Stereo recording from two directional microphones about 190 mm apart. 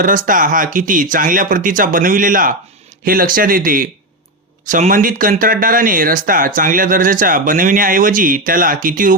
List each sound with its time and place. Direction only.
0.0 s speech: 45° right (ahead or behind)